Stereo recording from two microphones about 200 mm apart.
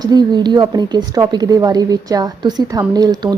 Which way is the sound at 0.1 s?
20° right (ahead or behind).